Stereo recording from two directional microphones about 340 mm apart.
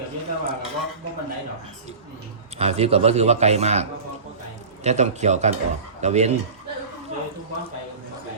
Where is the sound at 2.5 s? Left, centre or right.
Centre.